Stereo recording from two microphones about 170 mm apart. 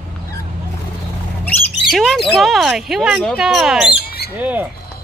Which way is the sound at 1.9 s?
Centre (ahead or behind).